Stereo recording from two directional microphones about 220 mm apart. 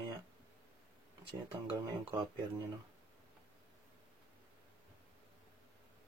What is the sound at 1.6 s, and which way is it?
Speech, 25° right (ahead or behind).